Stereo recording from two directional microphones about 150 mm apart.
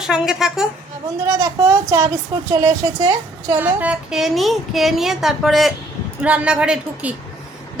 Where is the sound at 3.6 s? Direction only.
10° right (ahead or behind).